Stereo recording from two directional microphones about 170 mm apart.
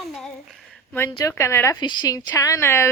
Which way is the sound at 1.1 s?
20° left (ahead or behind).